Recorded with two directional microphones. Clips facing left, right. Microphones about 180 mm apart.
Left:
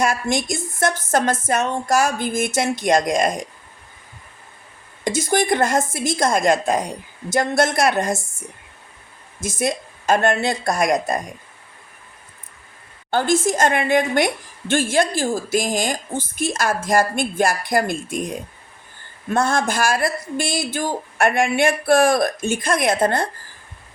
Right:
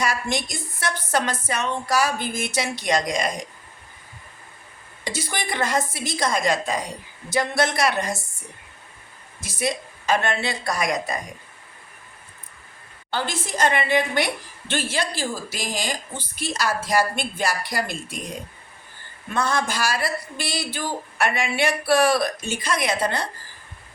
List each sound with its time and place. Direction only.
0.0 s speech: 50° left (ahead or behind)
5.0 s speech: 45° left (ahead or behind)
9.4 s speech: 45° left (ahead or behind)
13.1 s speech: 45° left (ahead or behind)
19.3 s speech: 50° left (ahead or behind)